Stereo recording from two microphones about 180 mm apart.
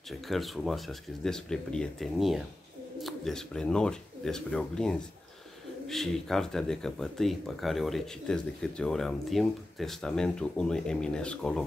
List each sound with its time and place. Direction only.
0.3 s speech: centre (ahead or behind)